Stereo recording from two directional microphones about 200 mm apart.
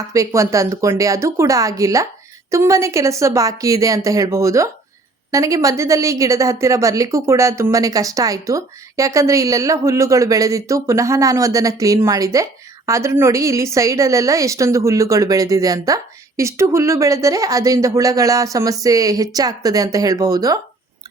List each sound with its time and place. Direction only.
0.1 s a woman's voice: 15° right (ahead or behind)